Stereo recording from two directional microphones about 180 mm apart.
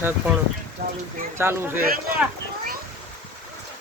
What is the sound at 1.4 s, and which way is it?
Speech, 15° right (ahead or behind).